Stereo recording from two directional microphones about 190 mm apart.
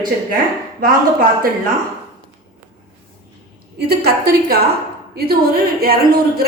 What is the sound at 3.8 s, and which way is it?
A woman's voice, 55° right (ahead or behind).